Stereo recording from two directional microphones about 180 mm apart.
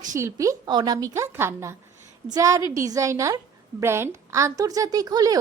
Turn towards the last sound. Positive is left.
turn(degrees=-20)  # may be behind; listen again after turning